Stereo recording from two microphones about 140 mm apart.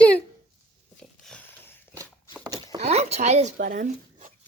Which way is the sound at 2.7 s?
50° right (ahead or behind).